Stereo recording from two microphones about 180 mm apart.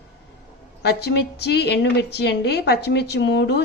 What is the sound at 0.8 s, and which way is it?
A woman's voice, 65° left (ahead or behind).